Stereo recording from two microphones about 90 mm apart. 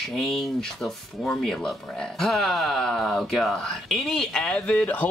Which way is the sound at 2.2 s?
5° left (ahead or behind).